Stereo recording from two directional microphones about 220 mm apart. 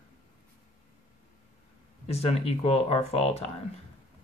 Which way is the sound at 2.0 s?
25° left (ahead or behind).